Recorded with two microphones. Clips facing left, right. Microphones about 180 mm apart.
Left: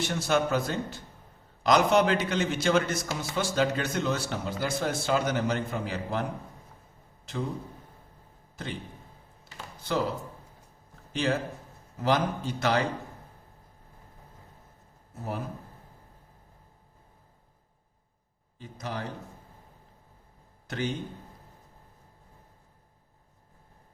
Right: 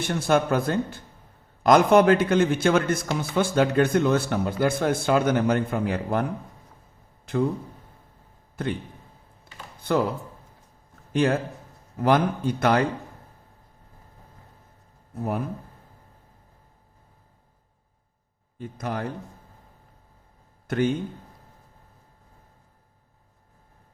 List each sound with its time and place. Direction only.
0.0 s a man's voice: 55° right (ahead or behind)
8.6 s a man's voice: 55° right (ahead or behind)
9.4 s a sound: 55° right (ahead or behind)
11.1 s a man's voice: 55° right (ahead or behind)
15.2 s a man's voice: 55° right (ahead or behind)
18.5 s a man's voice: 55° right (ahead or behind)
20.7 s a man's voice: 55° right (ahead or behind)